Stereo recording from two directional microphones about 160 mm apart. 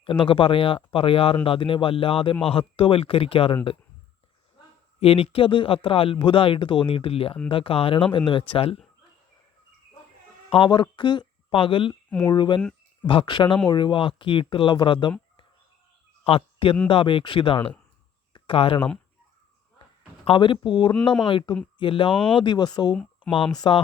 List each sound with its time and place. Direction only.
0.0 s speech: 30° left (ahead or behind)
4.9 s speech: 35° left (ahead or behind)
10.5 s speech: 30° left (ahead or behind)
16.2 s a sound: 35° left (ahead or behind)
16.9 s speech: 35° left (ahead or behind)
20.2 s speech: 30° left (ahead or behind)
22.1 s speech: 5° left (ahead or behind)
22.4 s speech: 30° left (ahead or behind)